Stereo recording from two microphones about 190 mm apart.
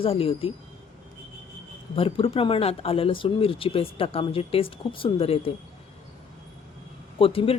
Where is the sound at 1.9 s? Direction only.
30° left (ahead or behind).